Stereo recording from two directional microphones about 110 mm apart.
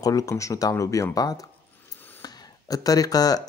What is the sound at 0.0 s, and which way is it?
Speech, 30° left (ahead or behind).